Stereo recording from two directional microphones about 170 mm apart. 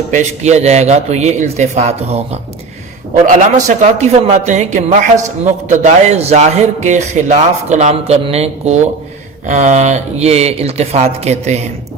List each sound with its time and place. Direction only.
0.1 s a man's voice: 45° right (ahead or behind)
3.2 s a man's voice: 50° right (ahead or behind)